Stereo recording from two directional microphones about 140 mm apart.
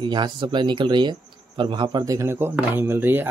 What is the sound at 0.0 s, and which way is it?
Speech, 35° right (ahead or behind).